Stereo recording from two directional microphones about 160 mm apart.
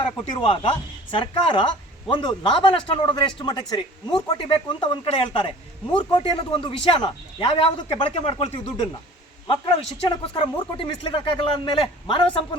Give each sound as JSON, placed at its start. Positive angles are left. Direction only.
{"t": 0.0, "sound": "speech", "side_deg": 35}
{"t": 10.0, "sound": "speech", "side_deg": 35}